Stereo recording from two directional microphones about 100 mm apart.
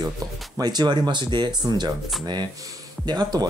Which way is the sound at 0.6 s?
45° right (ahead or behind).